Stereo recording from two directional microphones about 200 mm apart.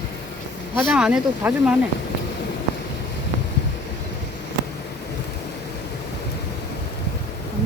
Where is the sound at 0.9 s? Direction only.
5° right (ahead or behind).